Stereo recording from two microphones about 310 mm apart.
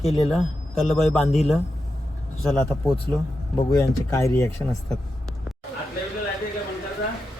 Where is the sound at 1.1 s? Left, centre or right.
Centre.